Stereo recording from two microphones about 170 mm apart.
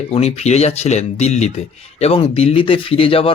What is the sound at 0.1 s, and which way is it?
Speech, 40° left (ahead or behind).